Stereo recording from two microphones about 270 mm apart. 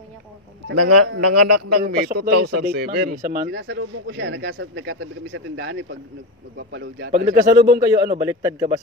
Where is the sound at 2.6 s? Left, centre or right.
Right.